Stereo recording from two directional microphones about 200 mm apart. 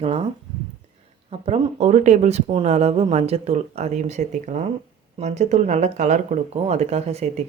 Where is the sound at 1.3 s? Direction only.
30° right (ahead or behind).